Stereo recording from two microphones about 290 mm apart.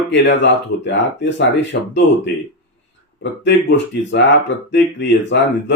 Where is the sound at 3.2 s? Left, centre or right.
Left.